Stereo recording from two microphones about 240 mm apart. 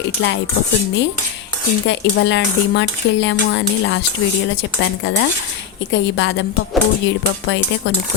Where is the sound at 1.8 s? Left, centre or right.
Left.